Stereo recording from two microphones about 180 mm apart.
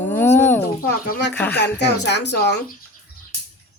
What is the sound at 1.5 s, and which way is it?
Speech, 70° left (ahead or behind).